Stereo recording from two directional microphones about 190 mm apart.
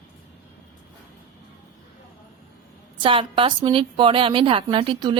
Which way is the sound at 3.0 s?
25° right (ahead or behind).